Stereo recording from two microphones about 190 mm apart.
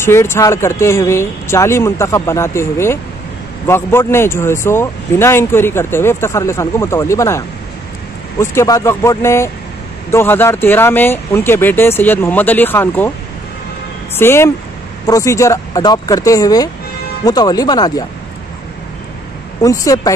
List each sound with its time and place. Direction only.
0.0 s speech: 15° left (ahead or behind)
14.1 s speech: 10° left (ahead or behind)
19.6 s speech: 20° left (ahead or behind)